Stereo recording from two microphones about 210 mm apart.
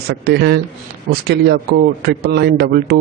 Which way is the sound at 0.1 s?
55° right (ahead or behind).